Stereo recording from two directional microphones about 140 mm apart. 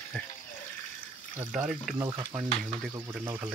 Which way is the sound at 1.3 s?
5° right (ahead or behind).